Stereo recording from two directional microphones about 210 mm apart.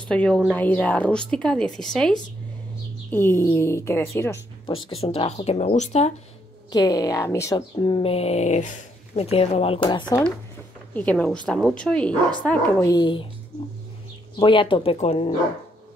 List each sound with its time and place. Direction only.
0.1 s speech: 5° left (ahead or behind)
5.0 s speech: 25° left (ahead or behind)
6.7 s a woman's voice: 20° left (ahead or behind)
10.9 s speech: 5° left (ahead or behind)
12.9 s a woman's voice: 25° left (ahead or behind)
14.3 s a woman's voice: 25° left (ahead or behind)